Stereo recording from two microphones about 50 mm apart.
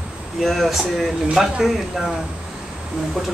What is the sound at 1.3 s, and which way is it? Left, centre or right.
Speech, centre.